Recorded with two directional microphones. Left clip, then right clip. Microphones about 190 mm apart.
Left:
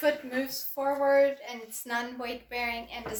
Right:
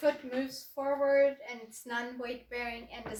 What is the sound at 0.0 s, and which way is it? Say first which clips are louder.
A woman's voice: left 3 dB; centre (ahead or behind).